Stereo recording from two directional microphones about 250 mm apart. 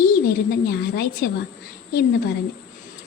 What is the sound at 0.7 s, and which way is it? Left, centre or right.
A woman's voice, left.